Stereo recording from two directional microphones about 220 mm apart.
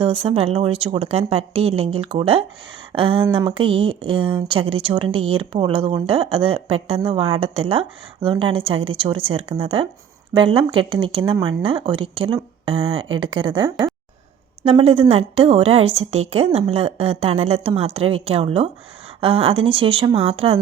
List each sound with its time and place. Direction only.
0.0 s speech: 25° right (ahead or behind)